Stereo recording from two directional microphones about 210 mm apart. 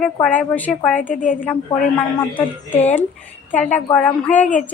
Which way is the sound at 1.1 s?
40° left (ahead or behind).